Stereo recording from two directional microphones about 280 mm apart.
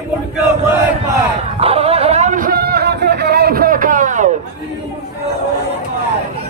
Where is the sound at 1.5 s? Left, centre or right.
Right.